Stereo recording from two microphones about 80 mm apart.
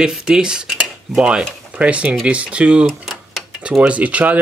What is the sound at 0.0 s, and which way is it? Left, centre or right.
Speech, centre.